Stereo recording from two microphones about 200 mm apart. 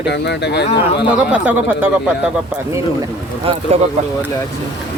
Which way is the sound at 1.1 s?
5° right (ahead or behind).